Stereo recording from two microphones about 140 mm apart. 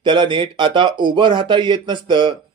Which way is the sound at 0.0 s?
35° right (ahead or behind).